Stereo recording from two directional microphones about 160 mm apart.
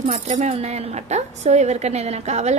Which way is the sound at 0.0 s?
45° right (ahead or behind).